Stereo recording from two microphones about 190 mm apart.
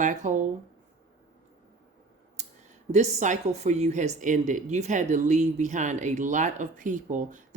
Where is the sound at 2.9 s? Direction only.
35° right (ahead or behind).